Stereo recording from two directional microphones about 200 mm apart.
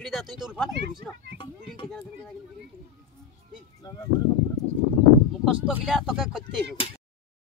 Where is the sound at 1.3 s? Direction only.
25° left (ahead or behind).